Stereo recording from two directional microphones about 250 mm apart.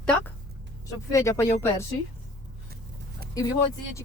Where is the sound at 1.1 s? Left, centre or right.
Centre.